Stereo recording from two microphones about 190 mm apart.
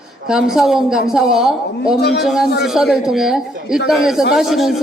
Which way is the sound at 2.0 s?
60° left (ahead or behind).